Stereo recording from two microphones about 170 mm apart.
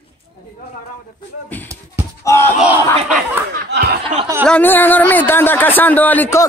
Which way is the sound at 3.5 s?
70° right (ahead or behind).